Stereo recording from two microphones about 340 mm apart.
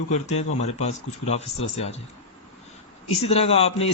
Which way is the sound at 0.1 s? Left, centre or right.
Centre.